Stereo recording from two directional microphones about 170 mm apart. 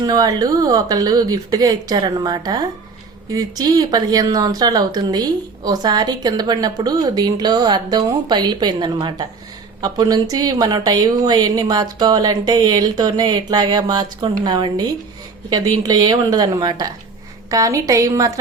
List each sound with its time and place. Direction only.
0.0 s speech: 25° right (ahead or behind)